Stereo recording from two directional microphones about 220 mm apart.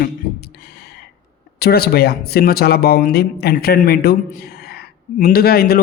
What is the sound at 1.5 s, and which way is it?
Speech, 45° left (ahead or behind).